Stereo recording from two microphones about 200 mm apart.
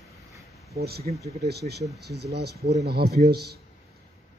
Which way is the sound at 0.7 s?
50° right (ahead or behind).